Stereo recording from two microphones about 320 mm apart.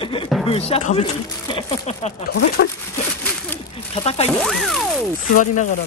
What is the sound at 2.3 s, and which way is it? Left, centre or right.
Speech, left.